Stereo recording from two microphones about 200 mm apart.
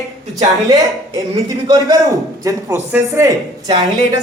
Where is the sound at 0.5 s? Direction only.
20° right (ahead or behind).